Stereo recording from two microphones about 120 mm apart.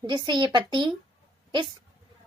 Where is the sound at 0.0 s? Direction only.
40° right (ahead or behind).